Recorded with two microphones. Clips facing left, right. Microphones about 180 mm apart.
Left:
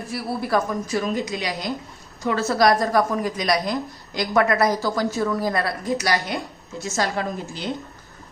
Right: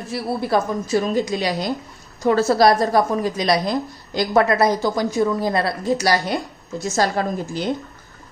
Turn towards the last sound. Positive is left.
turn(degrees=-40)  # may be behind; listen again after turning